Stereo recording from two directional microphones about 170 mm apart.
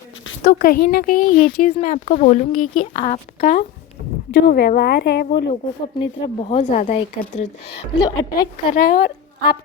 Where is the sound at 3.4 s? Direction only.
55° left (ahead or behind).